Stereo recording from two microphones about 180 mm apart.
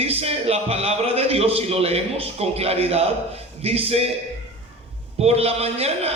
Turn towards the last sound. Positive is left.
turn(degrees=-35)  # may be behind; listen again after turning